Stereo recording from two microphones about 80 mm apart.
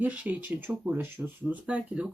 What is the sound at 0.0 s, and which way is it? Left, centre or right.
Speech, centre.